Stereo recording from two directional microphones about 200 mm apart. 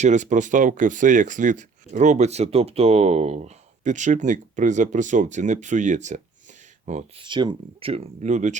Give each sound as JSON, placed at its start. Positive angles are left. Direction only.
{"t": 0.0, "sound": "speech", "side_deg": -35}
{"t": 7.3, "sound": "speech", "side_deg": -25}